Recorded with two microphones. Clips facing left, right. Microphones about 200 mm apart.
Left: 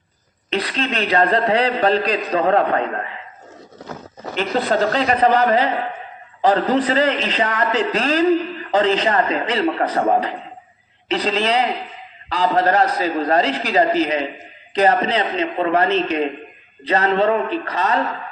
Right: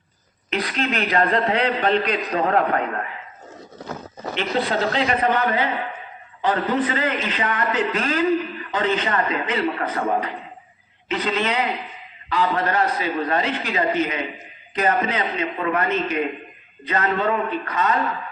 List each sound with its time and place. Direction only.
0.5 s a man's voice: 30° left (ahead or behind)
4.4 s a man's voice: 40° left (ahead or behind)